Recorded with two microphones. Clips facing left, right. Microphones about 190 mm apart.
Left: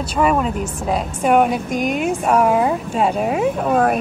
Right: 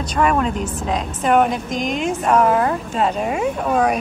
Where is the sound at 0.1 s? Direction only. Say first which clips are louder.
Left 1 dB; 5° left (ahead or behind).